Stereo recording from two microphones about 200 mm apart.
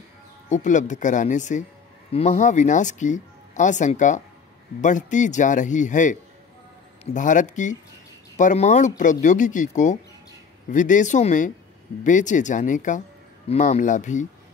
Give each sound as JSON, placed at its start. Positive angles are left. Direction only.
{"t": 0.5, "sound": "speech", "side_deg": 40}
{"t": 7.2, "sound": "speech", "side_deg": 40}